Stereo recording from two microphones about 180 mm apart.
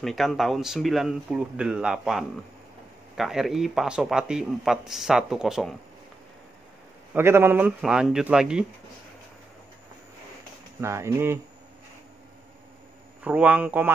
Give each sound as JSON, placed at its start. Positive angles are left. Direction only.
{"t": 0.0, "sound": "speech", "side_deg": 0}
{"t": 7.2, "sound": "speech", "side_deg": -15}
{"t": 10.8, "sound": "a man's voice", "side_deg": -15}
{"t": 13.2, "sound": "a man's voice", "side_deg": -10}